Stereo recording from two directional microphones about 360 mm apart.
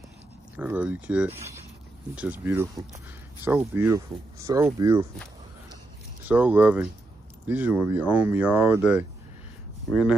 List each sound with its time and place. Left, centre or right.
0.6 s speech: centre
1.4 s speech: right
2.1 s speech: centre
6.2 s speech: centre